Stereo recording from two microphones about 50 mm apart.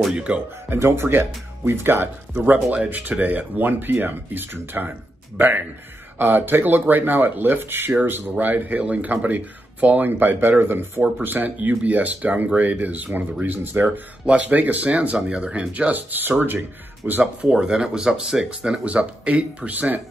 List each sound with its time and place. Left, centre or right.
0.1 s speech: right
0.7 s speech: right
1.0 s speech: right; by 15.9 s centre
15.9 s speech: right
17.5 s speech: centre
18.9 s speech: right